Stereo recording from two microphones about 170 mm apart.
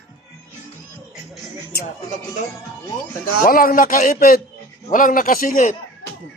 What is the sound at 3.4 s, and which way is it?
A man's voice, 55° left (ahead or behind).